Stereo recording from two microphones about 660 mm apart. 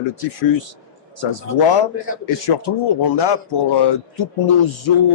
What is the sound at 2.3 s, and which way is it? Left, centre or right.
A man's voice, left.